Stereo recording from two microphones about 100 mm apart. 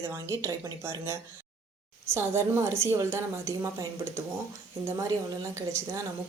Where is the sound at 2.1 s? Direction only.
25° right (ahead or behind).